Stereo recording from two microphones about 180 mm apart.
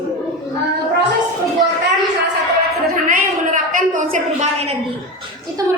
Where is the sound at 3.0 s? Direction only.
45° right (ahead or behind).